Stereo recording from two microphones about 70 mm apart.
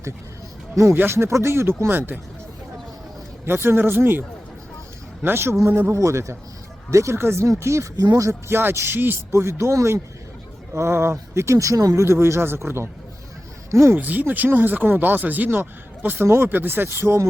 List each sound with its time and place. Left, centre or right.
0.9 s speech: right
3.4 s speech: right
7.9 s speech: right
8.3 s speech: right
9.3 s speech: right
13.9 s speech: right